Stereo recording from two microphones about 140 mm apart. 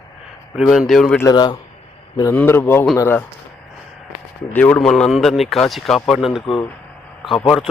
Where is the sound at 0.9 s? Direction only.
5° left (ahead or behind).